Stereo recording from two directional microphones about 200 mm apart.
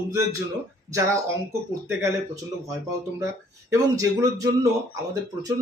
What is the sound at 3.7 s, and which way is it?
Speech, 15° right (ahead or behind).